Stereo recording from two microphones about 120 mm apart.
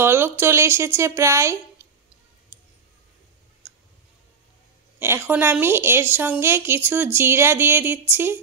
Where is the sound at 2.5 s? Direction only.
25° right (ahead or behind).